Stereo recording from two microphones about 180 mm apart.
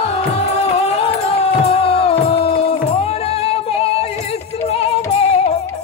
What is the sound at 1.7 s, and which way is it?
Music, 35° left (ahead or behind).